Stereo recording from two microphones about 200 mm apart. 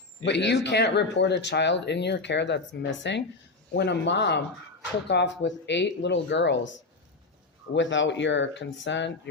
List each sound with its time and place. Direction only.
0.2 s speech: 60° left (ahead or behind)
7.7 s speech: 65° left (ahead or behind)